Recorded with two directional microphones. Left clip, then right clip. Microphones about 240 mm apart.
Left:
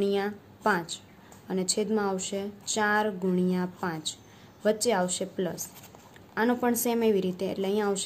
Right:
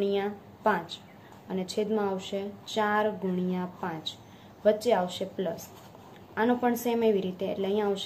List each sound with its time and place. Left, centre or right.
0.0 s a woman's voice: left